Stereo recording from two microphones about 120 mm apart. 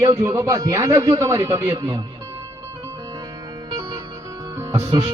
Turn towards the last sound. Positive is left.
turn(degrees=-25)  # may be behind; listen again after turning